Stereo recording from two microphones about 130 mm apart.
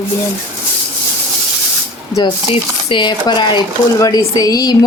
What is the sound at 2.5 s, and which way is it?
Speech, 40° left (ahead or behind).